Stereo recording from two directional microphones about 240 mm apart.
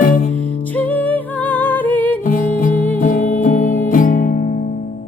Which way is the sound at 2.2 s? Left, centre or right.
Left.